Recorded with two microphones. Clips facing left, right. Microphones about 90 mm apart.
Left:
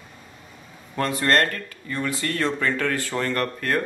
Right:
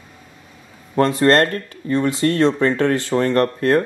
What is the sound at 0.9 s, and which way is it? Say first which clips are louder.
Speech: right 7 dB; 30° right (ahead or behind).